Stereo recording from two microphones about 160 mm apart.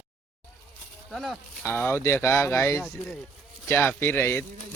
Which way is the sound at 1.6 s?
15° left (ahead or behind).